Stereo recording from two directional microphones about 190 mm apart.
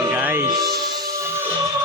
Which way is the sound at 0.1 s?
10° right (ahead or behind).